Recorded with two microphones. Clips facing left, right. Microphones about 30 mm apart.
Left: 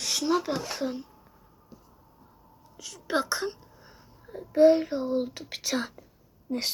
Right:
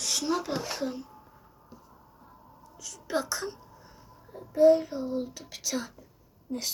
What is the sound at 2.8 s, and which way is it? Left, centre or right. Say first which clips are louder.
Whispering: left 3 dB; left.